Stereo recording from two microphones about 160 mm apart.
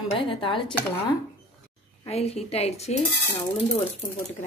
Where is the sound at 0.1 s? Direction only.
35° left (ahead or behind).